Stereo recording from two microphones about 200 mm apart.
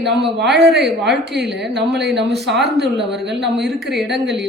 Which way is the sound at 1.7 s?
55° right (ahead or behind).